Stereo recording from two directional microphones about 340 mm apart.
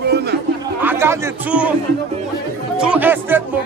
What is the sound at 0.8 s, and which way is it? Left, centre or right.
Speech, centre.